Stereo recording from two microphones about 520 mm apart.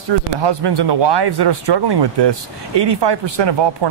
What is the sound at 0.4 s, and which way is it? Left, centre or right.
Speech, right.